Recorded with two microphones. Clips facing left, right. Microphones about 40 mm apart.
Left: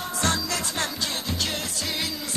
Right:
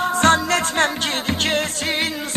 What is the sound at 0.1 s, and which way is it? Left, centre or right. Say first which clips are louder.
Music: right 9 dB; right.